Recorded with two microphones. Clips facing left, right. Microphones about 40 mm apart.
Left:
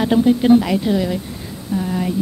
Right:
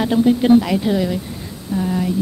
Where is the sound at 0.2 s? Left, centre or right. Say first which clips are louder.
Right 1 dB; centre.